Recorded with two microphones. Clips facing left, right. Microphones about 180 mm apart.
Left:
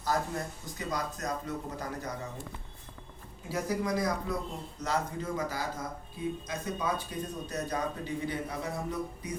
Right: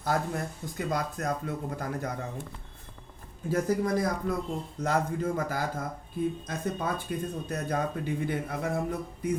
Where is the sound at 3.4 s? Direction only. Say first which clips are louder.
Right 5 dB; 50° right (ahead or behind).